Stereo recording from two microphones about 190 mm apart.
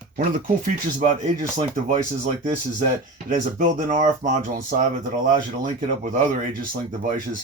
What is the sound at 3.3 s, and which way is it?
Speech, 40° right (ahead or behind).